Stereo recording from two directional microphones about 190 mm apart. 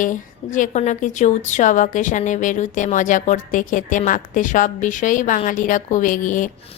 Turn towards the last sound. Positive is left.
turn(degrees=45)  # may be behind; listen again after turning